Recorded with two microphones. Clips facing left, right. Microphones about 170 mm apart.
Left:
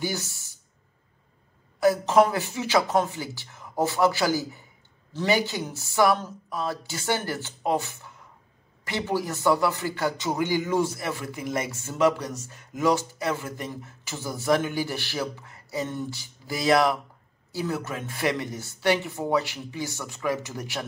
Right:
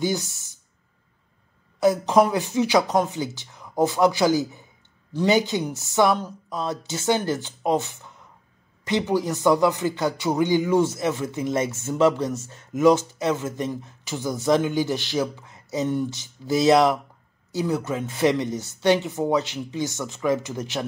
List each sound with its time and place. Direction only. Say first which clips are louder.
0.0 s speech: right 5 dB; 20° right (ahead or behind)
1.8 s a man's voice: right 1 dB; 20° right (ahead or behind)